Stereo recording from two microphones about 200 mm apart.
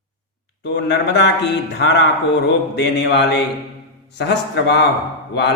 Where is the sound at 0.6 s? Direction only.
55° left (ahead or behind).